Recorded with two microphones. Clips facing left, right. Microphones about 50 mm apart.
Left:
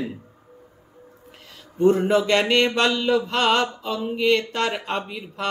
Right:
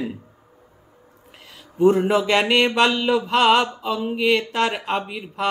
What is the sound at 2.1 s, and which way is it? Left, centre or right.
Speech, centre.